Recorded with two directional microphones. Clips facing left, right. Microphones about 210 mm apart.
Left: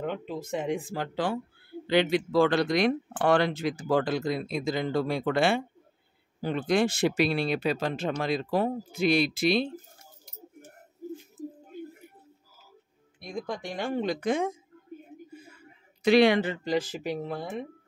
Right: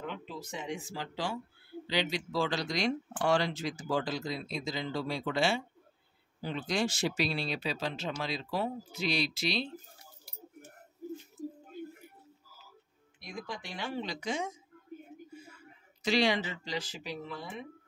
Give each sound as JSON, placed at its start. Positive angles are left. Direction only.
{"t": 0.0, "sound": "speech", "side_deg": 55}
{"t": 13.2, "sound": "speech", "side_deg": 50}
{"t": 16.0, "sound": "speech", "side_deg": 55}